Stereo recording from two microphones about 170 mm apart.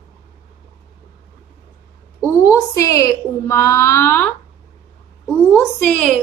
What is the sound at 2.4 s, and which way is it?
A woman's voice, 20° left (ahead or behind).